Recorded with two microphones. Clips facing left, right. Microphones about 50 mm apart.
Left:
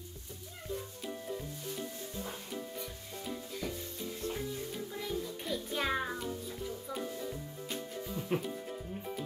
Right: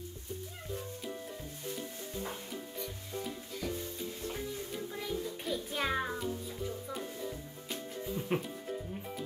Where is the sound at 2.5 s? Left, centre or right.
Centre.